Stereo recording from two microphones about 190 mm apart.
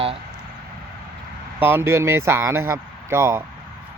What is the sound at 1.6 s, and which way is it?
A man's voice, 10° right (ahead or behind).